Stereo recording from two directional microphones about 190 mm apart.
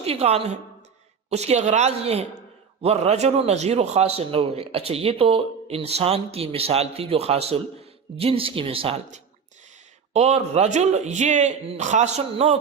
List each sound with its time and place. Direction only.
0.0 s a man's voice: 30° right (ahead or behind)